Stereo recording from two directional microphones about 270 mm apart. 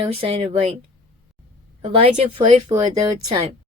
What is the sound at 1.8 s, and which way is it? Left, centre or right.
Speech, right.